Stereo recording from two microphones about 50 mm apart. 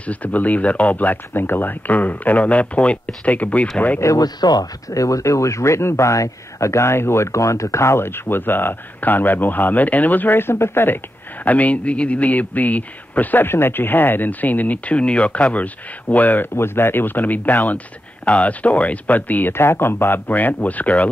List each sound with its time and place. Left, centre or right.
0.0 s speech: left
4.1 s speech: left
8.0 s speech: left
11.4 s speech: left
13.5 s speech: left
16.5 s speech: left
19.5 s speech: left
20.2 s speech: left